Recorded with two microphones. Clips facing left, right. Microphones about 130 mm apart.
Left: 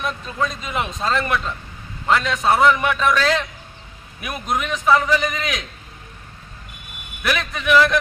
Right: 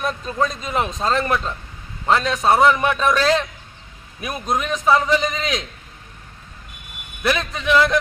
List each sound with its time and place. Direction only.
0.0 s a man's voice: 40° right (ahead or behind)
7.2 s a man's voice: 30° right (ahead or behind)